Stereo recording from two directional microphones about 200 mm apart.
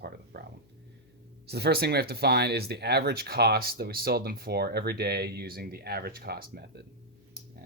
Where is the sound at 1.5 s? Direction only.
55° right (ahead or behind).